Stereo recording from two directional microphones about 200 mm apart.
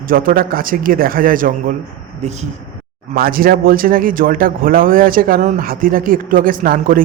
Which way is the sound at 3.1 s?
45° right (ahead or behind).